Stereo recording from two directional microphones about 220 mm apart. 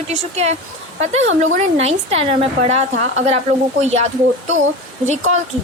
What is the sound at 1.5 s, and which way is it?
Speech, 30° right (ahead or behind).